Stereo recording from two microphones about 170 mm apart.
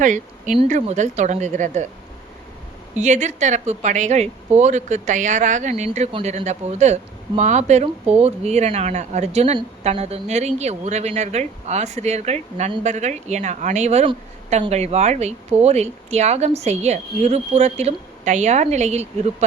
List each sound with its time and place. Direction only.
0.0 s a woman's voice: 50° right (ahead or behind)
3.0 s a woman's voice: 45° right (ahead or behind)